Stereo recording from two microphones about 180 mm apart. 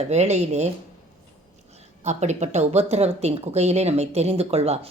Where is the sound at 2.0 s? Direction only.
40° right (ahead or behind).